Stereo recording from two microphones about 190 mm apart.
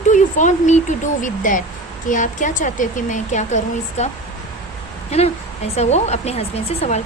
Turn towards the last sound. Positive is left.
turn(degrees=35)  # may be behind; listen again after turning